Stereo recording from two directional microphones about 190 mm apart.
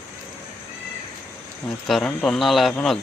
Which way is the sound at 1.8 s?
Centre (ahead or behind).